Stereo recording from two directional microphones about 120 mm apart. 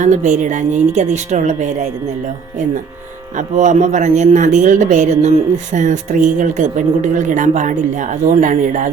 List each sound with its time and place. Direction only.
0.0 s a woman's voice: 85° right
3.3 s speech: 90° right